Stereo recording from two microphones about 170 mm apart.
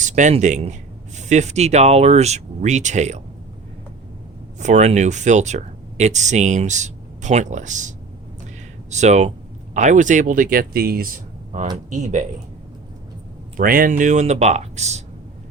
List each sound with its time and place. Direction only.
0.0 s speech: 45° right (ahead or behind)
4.6 s speech: 45° right (ahead or behind)
13.6 s speech: 55° right (ahead or behind)